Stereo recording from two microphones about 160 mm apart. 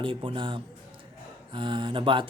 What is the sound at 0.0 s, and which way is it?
Speech, 35° right (ahead or behind).